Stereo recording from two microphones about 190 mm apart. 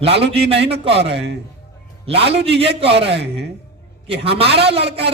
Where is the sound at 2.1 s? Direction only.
30° right (ahead or behind).